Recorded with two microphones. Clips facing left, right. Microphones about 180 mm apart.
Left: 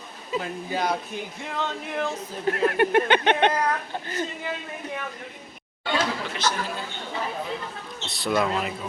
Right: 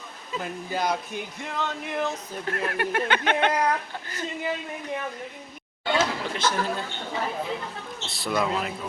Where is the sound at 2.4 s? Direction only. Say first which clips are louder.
Left 7 dB; 25° left (ahead or behind).